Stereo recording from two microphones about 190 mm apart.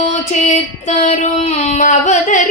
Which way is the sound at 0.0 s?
40° left (ahead or behind).